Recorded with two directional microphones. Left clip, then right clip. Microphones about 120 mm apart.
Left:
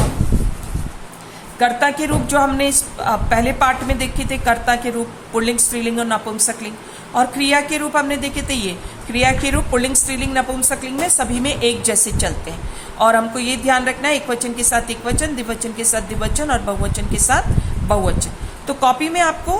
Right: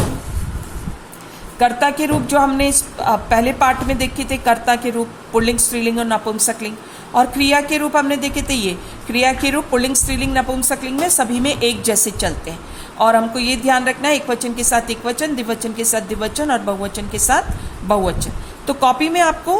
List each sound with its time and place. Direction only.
1.5 s a woman's voice: 25° right (ahead or behind)